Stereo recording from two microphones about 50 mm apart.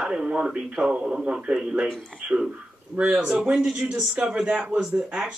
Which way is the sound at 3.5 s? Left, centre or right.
Right.